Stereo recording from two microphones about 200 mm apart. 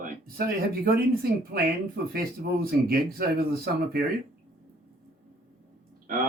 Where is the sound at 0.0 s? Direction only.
45° right (ahead or behind).